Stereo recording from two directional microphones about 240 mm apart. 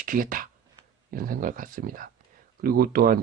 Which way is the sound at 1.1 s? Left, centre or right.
Right.